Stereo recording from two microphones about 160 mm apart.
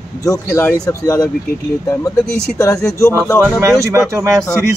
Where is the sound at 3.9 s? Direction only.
20° right (ahead or behind).